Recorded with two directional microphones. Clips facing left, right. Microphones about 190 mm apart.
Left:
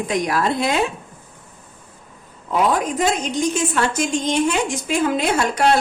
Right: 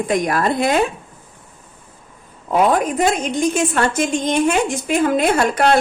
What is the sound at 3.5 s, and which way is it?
A woman's voice, 55° right (ahead or behind).